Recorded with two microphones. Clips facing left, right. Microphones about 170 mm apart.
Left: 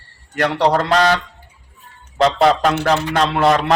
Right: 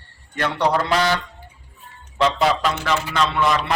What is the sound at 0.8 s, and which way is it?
Speech, 60° left (ahead or behind).